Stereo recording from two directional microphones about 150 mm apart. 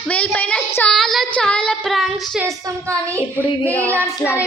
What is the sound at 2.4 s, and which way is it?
A woman's voice, 20° right (ahead or behind).